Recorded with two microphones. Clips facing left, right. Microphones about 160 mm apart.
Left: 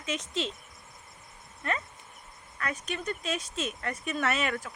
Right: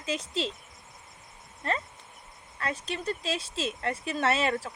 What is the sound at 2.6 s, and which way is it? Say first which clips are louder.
Speech: right 2 dB; 30° right (ahead or behind).